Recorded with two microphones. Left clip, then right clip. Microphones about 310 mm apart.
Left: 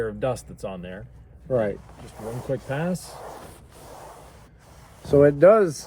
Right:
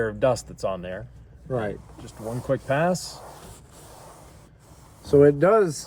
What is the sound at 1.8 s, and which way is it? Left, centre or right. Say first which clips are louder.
Speech: left 1 dB; left.